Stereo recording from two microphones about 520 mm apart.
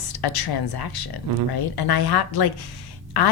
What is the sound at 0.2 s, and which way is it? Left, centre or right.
Speech, left.